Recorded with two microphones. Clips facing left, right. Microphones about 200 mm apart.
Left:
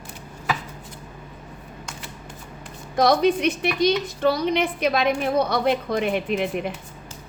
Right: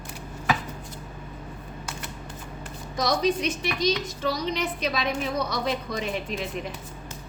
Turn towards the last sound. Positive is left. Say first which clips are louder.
# left 7 dB
turn(degrees=60)  # may be behind; listen again after turning